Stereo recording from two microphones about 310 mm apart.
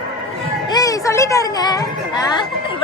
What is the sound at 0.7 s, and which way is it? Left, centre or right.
A woman's voice, centre.